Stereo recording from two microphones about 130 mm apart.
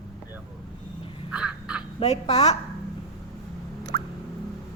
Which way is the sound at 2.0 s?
45° left (ahead or behind).